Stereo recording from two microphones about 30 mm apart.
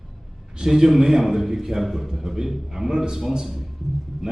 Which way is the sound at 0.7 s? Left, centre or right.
Centre.